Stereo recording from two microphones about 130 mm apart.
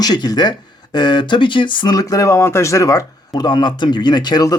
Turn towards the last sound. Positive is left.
turn(degrees=30)  # may be behind; listen again after turning